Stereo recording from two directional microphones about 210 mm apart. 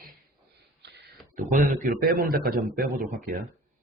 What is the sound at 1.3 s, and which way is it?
Speech, 40° right (ahead or behind).